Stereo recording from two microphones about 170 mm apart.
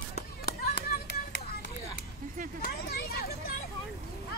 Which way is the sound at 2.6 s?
65° left (ahead or behind).